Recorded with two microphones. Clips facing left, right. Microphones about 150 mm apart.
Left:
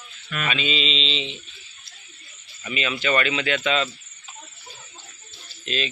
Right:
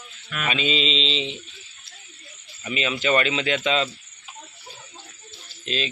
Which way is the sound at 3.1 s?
30° right (ahead or behind).